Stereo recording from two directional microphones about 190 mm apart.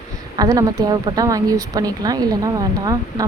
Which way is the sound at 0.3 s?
20° right (ahead or behind).